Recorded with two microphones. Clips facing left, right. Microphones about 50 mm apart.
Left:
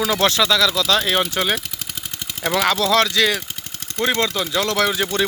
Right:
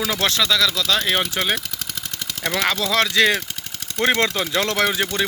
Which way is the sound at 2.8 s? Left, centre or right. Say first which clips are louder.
Left 4 dB; centre.